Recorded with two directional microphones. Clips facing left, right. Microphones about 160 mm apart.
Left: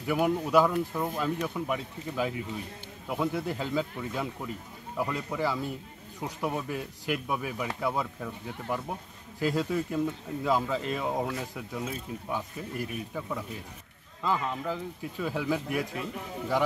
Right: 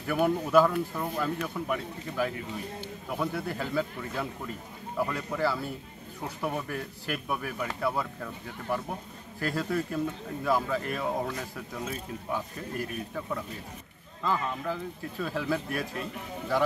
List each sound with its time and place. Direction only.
0.0 s speech: 10° left (ahead or behind)